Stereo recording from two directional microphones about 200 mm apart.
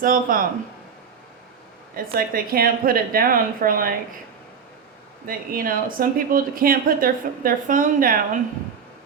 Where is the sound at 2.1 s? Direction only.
45° right (ahead or behind).